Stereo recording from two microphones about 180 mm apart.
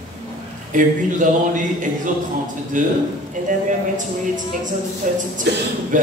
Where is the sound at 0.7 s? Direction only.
45° right (ahead or behind).